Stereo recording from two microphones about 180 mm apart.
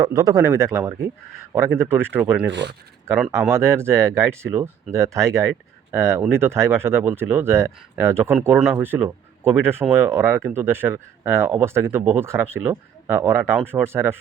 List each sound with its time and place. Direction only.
0.0 s speech: 20° right (ahead or behind)
2.5 s speech: 75° right (ahead or behind)
3.5 s speech: 15° right (ahead or behind)
13.6 s speech: 5° right (ahead or behind)
13.8 s speech: 15° right (ahead or behind)